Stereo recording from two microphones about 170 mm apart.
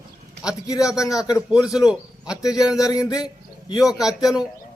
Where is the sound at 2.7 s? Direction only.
20° left (ahead or behind).